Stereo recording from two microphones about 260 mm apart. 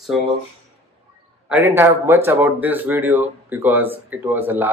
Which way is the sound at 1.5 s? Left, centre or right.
Centre.